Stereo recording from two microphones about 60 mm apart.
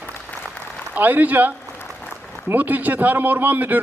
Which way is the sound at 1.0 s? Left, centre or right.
Right.